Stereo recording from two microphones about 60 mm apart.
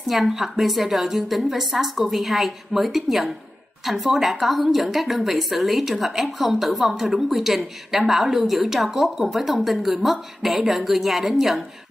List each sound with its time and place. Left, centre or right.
0.0 s a woman's voice: centre